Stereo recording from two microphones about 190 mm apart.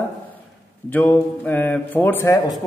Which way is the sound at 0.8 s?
10° left (ahead or behind).